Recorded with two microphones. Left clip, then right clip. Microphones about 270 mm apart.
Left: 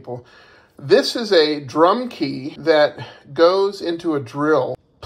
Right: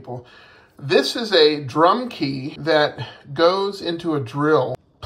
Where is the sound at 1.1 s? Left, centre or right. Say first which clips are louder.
Even; centre.